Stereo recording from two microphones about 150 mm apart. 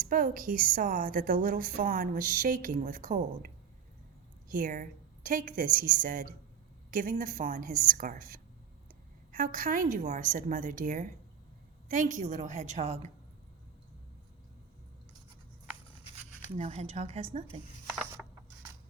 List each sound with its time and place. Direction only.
0.0 s a woman's voice: 65° right (ahead or behind); by 13.1 s 50° right (ahead or behind)
16.6 s a woman's voice: 45° right (ahead or behind)
18.2 s a sound: 5° right (ahead or behind)